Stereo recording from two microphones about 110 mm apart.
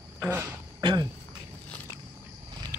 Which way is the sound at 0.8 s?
40° right (ahead or behind).